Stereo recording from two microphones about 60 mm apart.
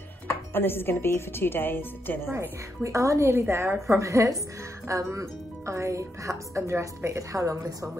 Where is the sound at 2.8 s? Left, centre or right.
Right.